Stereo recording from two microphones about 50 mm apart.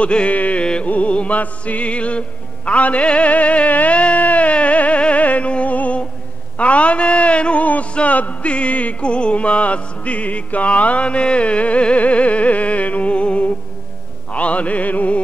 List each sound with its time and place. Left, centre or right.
0.0 s a man's voice: left
0.8 s music: left
6.6 s a man's voice: left
14.3 s music: left